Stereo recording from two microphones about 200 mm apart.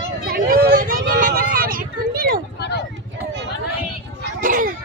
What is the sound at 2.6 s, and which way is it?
Speech, 55° left (ahead or behind).